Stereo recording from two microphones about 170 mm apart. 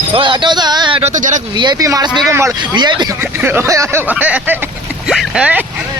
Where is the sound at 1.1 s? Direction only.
50° right (ahead or behind).